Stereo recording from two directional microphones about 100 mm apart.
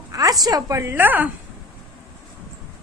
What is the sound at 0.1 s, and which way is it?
A woman's voice, 35° right (ahead or behind).